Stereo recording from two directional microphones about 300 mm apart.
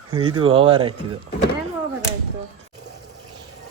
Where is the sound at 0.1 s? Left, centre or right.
Centre.